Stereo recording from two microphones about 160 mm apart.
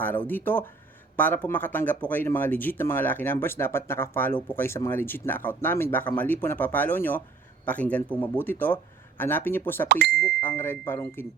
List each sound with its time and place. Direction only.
0.0 s speech: 10° left (ahead or behind)
9.9 s speech: 85° right
10.4 s speech: 15° left (ahead or behind)